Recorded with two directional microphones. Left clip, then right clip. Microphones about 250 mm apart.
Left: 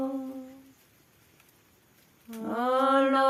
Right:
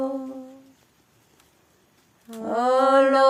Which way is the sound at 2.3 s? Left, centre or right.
Right.